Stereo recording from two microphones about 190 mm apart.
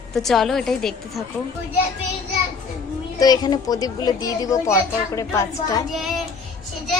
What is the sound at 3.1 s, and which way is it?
A child's voice, 20° left (ahead or behind).